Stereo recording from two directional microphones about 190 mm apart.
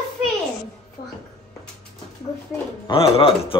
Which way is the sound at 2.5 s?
25° left (ahead or behind).